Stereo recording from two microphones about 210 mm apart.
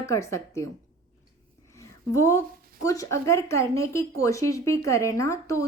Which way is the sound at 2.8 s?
15° left (ahead or behind).